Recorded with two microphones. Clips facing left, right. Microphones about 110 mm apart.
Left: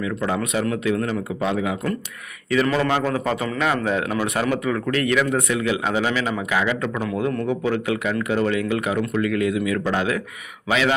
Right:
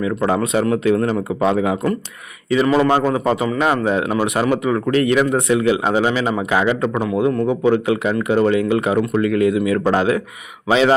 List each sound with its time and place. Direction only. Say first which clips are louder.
0.3 s a man's voice: right 6 dB; 35° right (ahead or behind)
3.0 s a man's voice: right 5 dB; 20° right (ahead or behind)
4.7 s a man's voice: right 5 dB; 25° right (ahead or behind)
7.0 s a man's voice: right 6 dB; 15° right (ahead or behind)